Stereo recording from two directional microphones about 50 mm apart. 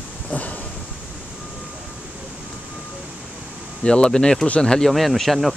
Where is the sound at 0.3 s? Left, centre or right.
Left.